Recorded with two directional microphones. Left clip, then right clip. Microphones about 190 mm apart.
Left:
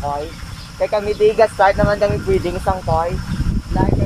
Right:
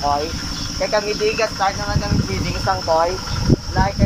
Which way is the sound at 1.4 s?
45° left (ahead or behind).